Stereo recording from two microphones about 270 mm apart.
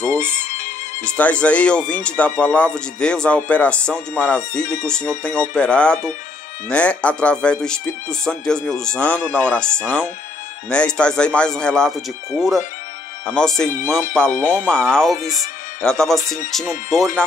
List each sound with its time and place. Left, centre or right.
0.4 s music: left
1.0 s speech: centre